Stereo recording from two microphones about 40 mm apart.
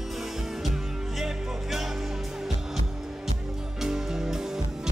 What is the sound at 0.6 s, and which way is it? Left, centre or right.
Music, centre.